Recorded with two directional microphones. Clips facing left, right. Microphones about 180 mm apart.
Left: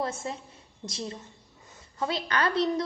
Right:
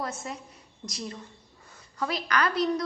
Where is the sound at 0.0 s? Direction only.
25° left (ahead or behind).